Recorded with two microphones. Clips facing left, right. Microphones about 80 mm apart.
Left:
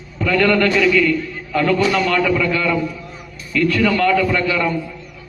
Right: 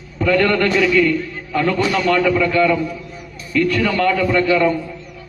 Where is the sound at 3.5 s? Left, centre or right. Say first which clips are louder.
Even; centre.